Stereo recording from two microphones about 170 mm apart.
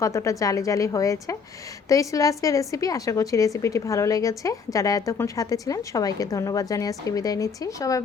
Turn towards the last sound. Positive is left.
turn(degrees=20)  # may be behind; listen again after turning